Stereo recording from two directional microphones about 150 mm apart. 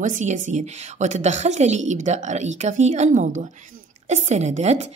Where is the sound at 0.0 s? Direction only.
55° right (ahead or behind).